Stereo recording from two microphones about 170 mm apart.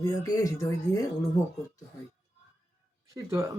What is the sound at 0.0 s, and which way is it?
Speech, 20° left (ahead or behind).